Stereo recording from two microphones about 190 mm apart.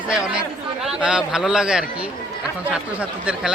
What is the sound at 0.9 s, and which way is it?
Speech, 5° right (ahead or behind).